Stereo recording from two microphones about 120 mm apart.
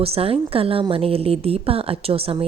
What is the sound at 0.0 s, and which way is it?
A woman's voice, 55° right (ahead or behind).